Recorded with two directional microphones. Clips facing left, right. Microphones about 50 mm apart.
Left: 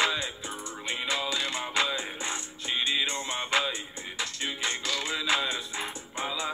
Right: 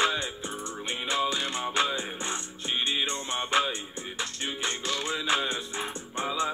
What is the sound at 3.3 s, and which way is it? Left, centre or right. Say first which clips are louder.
Music: right 4 dB; right.